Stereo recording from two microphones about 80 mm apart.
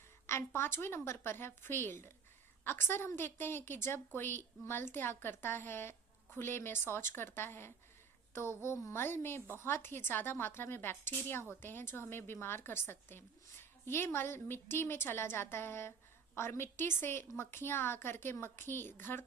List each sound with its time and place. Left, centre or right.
0.3 s a woman's voice: left